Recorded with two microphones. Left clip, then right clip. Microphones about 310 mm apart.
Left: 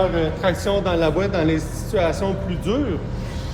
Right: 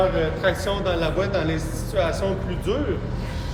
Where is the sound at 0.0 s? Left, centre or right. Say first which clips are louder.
Left 1 dB; left.